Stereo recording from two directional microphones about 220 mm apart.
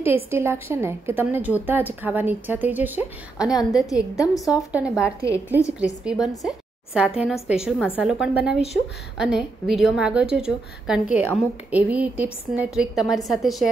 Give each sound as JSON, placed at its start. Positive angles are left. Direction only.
{"t": 0.0, "sound": "a woman's voice", "side_deg": -10}
{"t": 3.8, "sound": "a woman's voice", "side_deg": 15}
{"t": 4.5, "sound": "a woman's voice", "side_deg": -5}